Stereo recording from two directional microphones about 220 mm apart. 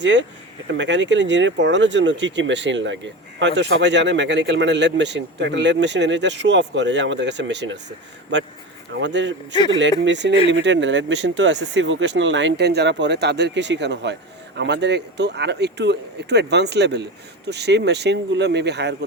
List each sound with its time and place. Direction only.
0.0 s speech: 55° right (ahead or behind)
9.0 s a man's voice: 55° right (ahead or behind)